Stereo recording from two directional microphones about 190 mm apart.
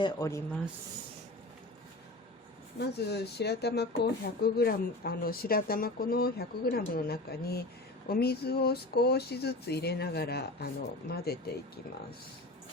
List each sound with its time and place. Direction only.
0.0 s speech: 15° left (ahead or behind)
2.7 s speech: 60° left (ahead or behind)